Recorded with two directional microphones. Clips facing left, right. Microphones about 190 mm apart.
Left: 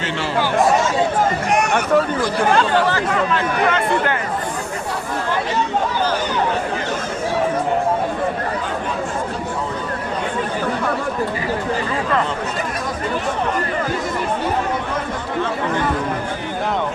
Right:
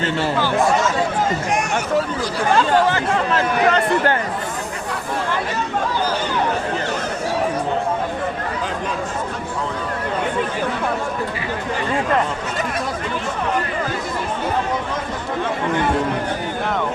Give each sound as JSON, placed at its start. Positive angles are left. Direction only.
{"t": 1.5, "sound": "speech", "side_deg": 65}
{"t": 3.3, "sound": "speech", "side_deg": -35}